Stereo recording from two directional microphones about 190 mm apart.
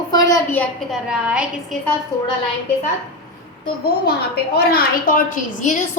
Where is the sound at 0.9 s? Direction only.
5° right (ahead or behind).